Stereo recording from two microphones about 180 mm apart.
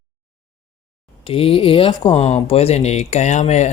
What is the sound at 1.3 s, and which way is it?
Speech, 30° left (ahead or behind).